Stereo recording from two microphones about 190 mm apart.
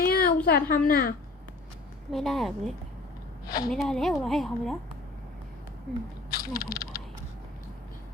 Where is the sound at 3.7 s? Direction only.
Centre (ahead or behind).